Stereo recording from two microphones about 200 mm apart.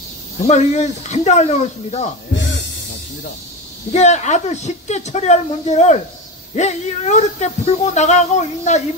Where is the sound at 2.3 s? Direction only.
60° left (ahead or behind).